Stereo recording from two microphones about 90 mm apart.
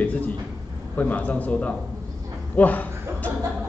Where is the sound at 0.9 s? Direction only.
20° left (ahead or behind).